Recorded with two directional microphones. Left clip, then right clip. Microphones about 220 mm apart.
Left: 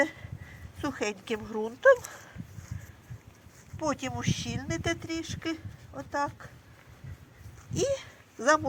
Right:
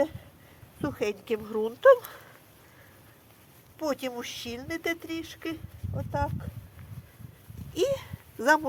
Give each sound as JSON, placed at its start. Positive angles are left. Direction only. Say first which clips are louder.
{"t": 0.8, "sound": "speech", "louder": "right 2 dB", "side_deg": -25}
{"t": 3.8, "sound": "speech", "louder": "right 1 dB", "side_deg": -30}
{"t": 7.7, "sound": "a sound", "louder": "right 2 dB", "side_deg": -20}